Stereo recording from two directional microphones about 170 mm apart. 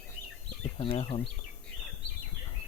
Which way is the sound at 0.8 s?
30° left (ahead or behind).